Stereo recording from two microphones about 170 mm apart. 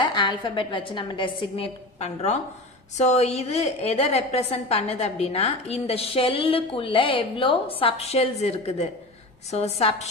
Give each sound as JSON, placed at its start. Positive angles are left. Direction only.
{"t": 0.0, "sound": "a woman's voice", "side_deg": 30}